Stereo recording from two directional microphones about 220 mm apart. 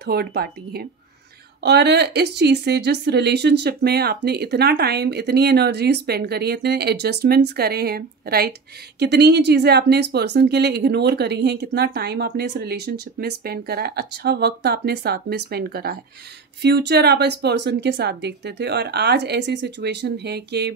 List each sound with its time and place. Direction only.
0.0 s a woman's voice: 45° right (ahead or behind)